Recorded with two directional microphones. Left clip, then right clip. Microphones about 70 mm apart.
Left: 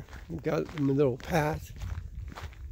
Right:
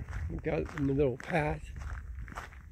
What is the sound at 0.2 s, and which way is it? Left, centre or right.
Speech, left.